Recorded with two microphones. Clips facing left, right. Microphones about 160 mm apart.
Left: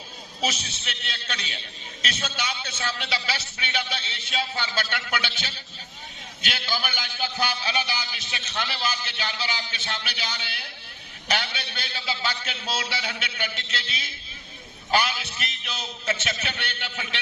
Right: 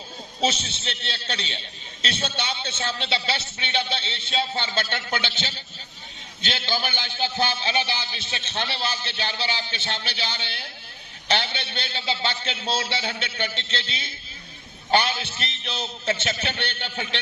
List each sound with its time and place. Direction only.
0.4 s a man's voice: 30° right (ahead or behind)